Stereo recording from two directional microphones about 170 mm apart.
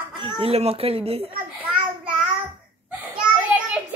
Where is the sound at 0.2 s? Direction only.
30° right (ahead or behind).